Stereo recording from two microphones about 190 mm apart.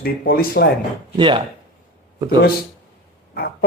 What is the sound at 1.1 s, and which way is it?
Speech, 25° right (ahead or behind).